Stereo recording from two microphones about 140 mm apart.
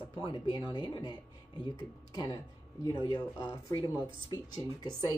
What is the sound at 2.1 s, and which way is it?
Speech, 30° left (ahead or behind).